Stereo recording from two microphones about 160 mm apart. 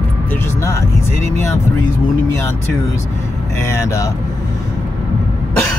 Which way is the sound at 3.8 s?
20° left (ahead or behind).